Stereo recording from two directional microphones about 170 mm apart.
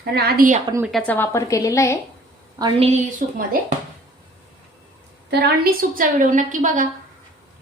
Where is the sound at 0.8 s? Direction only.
5° left (ahead or behind).